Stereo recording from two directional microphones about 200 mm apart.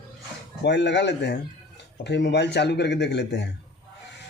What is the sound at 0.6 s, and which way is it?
Speech, 60° left (ahead or behind).